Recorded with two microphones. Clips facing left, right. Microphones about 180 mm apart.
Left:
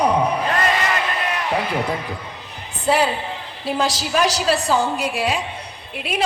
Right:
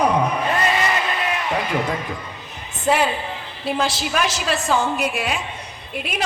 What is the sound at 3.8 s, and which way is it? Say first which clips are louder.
A man's voice: left 3 dB; 35° left (ahead or behind).